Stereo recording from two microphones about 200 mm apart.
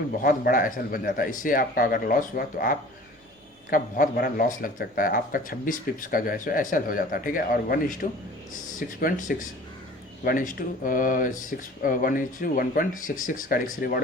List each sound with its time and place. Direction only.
0.2 s speech: 45° left (ahead or behind)